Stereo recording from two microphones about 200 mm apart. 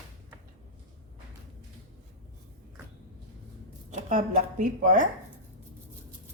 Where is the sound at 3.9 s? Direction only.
35° right (ahead or behind).